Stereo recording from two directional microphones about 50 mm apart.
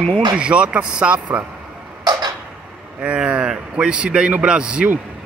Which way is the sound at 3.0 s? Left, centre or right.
Right.